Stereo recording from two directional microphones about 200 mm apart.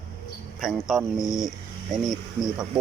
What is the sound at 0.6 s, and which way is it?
Speech, centre (ahead or behind).